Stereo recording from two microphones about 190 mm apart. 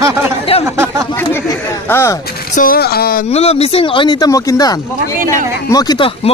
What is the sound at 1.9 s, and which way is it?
Speech, 15° left (ahead or behind).